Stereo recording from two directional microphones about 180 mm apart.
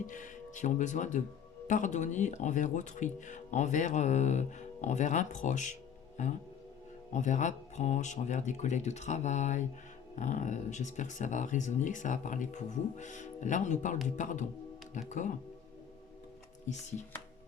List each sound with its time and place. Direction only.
0.0 s speech: 45° left (ahead or behind)